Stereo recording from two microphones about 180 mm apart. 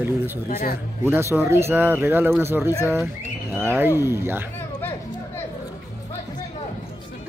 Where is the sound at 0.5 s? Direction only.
55° left (ahead or behind).